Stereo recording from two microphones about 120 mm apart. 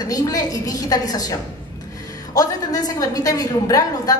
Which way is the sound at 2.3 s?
30° left (ahead or behind).